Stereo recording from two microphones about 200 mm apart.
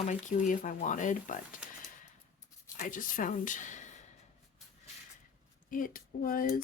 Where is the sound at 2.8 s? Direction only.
40° left (ahead or behind).